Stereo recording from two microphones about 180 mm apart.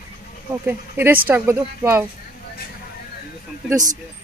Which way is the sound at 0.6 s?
10° right (ahead or behind).